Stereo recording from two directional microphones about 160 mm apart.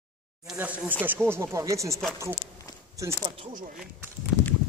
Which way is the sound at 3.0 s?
15° right (ahead or behind).